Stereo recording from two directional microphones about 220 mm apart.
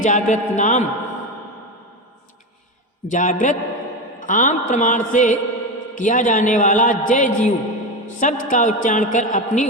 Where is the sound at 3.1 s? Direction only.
35° left (ahead or behind).